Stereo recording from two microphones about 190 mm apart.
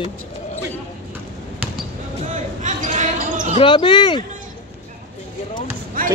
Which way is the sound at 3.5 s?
25° left (ahead or behind).